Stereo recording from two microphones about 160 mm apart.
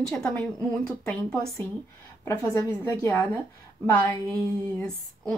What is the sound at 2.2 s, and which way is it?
A woman's voice, 20° left (ahead or behind).